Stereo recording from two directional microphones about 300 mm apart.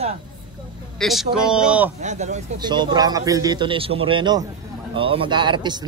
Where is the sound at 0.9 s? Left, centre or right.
Centre.